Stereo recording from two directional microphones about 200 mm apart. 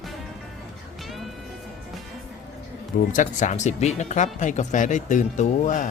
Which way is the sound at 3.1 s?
40° left (ahead or behind).